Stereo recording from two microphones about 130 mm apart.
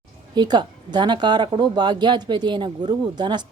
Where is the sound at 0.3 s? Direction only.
35° right (ahead or behind).